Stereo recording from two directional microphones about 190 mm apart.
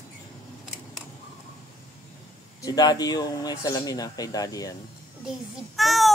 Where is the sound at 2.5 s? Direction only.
20° left (ahead or behind).